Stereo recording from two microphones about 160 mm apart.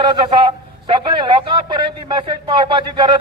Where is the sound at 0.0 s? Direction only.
30° right (ahead or behind).